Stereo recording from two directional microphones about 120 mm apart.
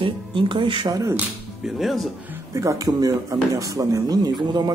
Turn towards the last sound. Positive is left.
turn(degrees=-35)  # may be behind; listen again after turning